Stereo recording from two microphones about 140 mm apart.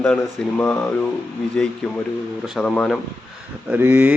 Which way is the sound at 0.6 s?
10° left (ahead or behind).